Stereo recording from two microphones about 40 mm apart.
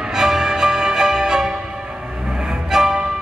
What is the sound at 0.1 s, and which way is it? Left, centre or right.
Music, centre.